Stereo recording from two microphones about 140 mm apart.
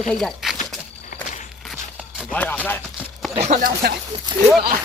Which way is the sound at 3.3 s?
60° right (ahead or behind).